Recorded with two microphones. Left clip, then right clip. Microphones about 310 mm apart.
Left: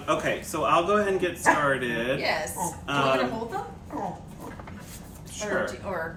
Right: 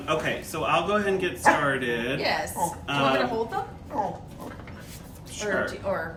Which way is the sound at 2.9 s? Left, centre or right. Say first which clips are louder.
Left 2 dB; centre.